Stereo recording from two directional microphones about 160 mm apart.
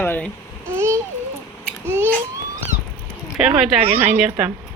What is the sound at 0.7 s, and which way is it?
Speech, 15° right (ahead or behind).